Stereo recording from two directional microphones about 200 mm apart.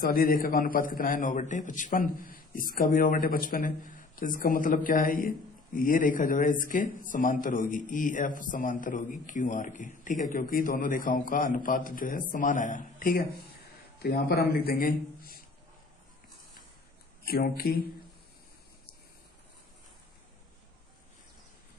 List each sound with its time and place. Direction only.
0.0 s a man's voice: 45° left (ahead or behind)
17.2 s a man's voice: 50° left (ahead or behind)